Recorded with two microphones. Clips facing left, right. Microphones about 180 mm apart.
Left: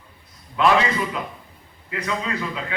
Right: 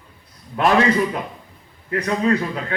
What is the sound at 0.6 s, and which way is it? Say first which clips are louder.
Speech: even; 45° right (ahead or behind).